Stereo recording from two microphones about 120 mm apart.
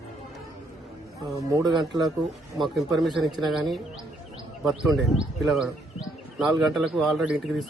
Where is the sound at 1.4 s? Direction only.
30° right (ahead or behind).